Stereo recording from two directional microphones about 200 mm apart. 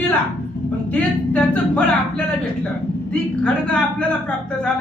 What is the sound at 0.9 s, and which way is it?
A woman's voice, 5° left (ahead or behind).